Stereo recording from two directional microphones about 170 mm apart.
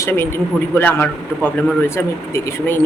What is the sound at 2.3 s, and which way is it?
Speech, 10° left (ahead or behind).